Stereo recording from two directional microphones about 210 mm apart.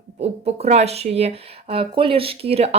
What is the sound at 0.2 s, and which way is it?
Speech, 30° right (ahead or behind).